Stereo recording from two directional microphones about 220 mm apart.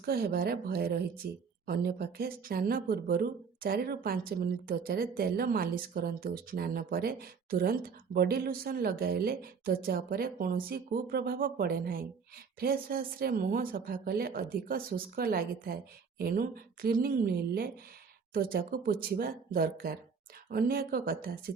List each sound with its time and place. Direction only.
0.0 s speech: 45° right (ahead or behind)